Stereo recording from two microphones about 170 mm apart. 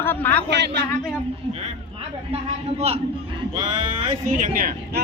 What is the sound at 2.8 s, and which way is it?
Speech, 40° right (ahead or behind).